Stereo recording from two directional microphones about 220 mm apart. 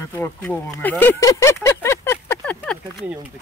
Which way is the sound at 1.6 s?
10° left (ahead or behind).